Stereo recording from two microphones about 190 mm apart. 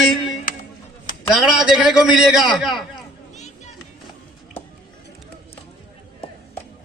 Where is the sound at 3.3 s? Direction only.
35° left (ahead or behind).